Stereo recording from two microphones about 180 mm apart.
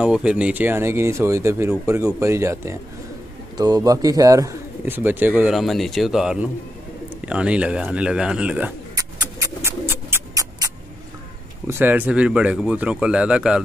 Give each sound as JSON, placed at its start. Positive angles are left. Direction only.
{"t": 0.0, "sound": "speech", "side_deg": -5}
{"t": 8.9, "sound": "bird", "side_deg": -20}
{"t": 11.6, "sound": "speech", "side_deg": -10}